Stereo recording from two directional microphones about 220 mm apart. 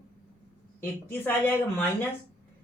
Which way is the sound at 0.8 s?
10° left (ahead or behind).